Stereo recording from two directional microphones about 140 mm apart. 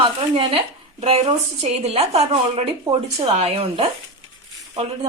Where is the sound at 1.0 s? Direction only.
45° right (ahead or behind).